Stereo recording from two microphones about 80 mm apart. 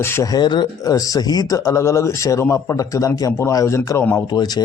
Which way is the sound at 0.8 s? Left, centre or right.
Left.